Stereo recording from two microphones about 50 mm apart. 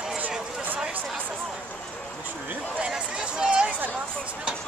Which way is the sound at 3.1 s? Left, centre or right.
Centre.